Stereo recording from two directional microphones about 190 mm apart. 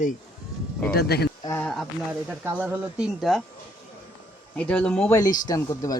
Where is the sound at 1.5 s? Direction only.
10° left (ahead or behind).